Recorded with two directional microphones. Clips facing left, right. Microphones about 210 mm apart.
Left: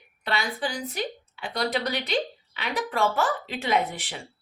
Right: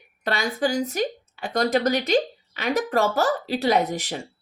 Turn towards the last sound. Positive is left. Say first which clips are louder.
# right 4 dB
turn(degrees=-40)  # may be behind; listen again after turning